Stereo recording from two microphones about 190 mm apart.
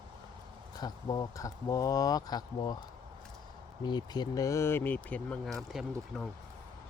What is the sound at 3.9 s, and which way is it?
Speech, 20° left (ahead or behind).